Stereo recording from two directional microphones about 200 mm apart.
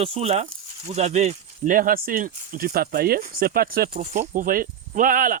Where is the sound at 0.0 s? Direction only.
30° right (ahead or behind).